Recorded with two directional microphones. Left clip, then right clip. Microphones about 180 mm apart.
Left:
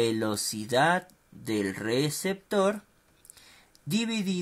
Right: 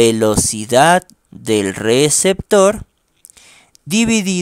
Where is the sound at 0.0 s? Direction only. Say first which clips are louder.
Right 15 dB; 55° right (ahead or behind).